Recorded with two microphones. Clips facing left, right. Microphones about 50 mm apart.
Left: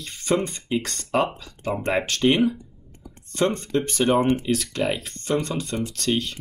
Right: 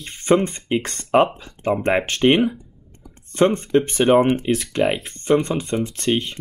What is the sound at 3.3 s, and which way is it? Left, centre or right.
Speech, right.